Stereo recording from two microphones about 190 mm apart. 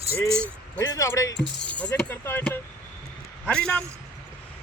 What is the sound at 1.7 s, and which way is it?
A man's voice, 5° left (ahead or behind).